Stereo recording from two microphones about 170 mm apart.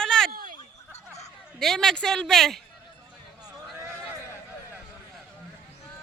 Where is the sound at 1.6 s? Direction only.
5° left (ahead or behind).